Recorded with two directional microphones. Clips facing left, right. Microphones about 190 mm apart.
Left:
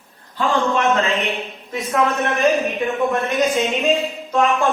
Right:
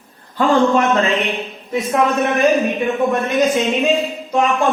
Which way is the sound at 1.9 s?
15° right (ahead or behind).